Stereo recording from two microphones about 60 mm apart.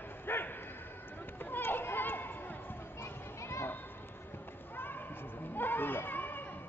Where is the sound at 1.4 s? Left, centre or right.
Left.